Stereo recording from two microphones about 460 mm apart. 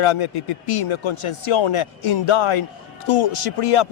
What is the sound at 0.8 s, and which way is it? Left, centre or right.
Speech, left.